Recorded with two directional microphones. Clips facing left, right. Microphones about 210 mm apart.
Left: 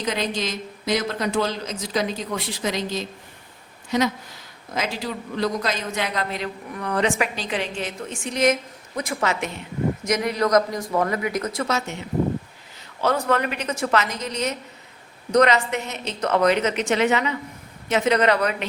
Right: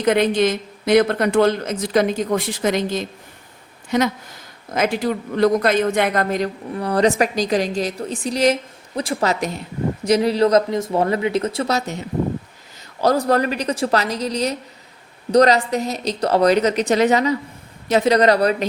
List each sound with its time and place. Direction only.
0.0 s a woman's voice: 55° right (ahead or behind); by 18.5 s 35° right (ahead or behind)